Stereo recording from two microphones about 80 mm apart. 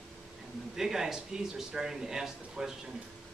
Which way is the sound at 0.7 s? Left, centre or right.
Centre.